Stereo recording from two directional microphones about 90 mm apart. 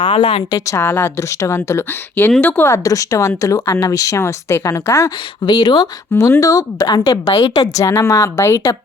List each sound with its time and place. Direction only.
0.5 s speech: 35° left (ahead or behind); by 2.6 s 15° left (ahead or behind)
2.6 s speech: 35° left (ahead or behind)
5.5 s a woman's voice: 50° left (ahead or behind)
7.9 s speech: 35° left (ahead or behind)